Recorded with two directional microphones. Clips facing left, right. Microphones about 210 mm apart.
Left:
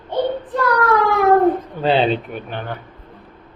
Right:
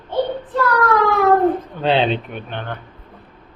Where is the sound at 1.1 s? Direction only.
15° left (ahead or behind).